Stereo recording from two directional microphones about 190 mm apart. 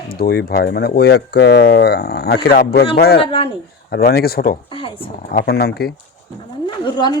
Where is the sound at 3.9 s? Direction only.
55° left (ahead or behind).